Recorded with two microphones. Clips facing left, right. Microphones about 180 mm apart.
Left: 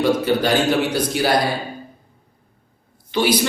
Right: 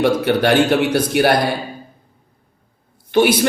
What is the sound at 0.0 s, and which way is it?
A man's voice, 65° right (ahead or behind).